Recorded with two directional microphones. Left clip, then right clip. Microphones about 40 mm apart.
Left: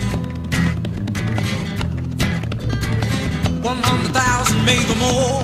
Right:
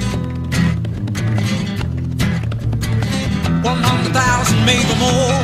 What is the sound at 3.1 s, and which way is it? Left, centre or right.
Music, right.